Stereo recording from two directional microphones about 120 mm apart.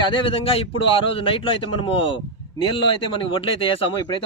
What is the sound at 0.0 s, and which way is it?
A man's voice, 45° left (ahead or behind).